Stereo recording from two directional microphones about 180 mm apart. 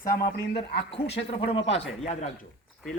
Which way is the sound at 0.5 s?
30° left (ahead or behind).